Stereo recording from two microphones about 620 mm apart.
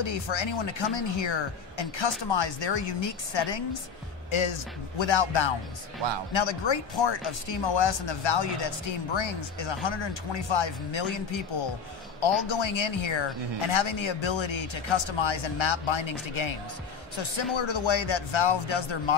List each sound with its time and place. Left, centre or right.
0.0 s speech: left